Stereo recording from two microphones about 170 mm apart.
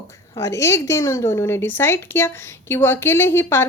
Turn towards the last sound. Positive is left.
turn(degrees=15)  # may be behind; listen again after turning